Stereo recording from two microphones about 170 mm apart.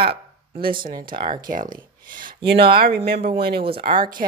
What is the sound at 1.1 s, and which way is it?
Speech, 30° right (ahead or behind).